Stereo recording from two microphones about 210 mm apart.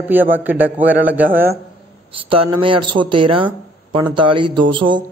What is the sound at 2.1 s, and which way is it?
Speech, 25° right (ahead or behind).